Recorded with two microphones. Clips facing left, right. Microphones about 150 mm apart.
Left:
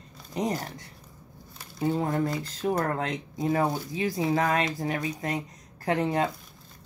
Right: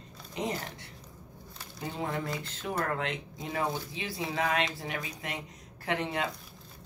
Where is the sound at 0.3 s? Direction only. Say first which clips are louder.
Left 5 dB; 40° left (ahead or behind).